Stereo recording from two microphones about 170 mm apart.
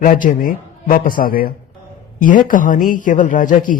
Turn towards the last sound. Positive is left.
turn(degrees=50)  # may be behind; listen again after turning